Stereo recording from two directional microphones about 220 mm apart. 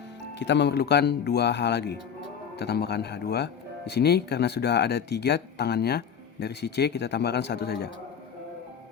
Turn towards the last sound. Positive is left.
turn(degrees=45)  # may be behind; listen again after turning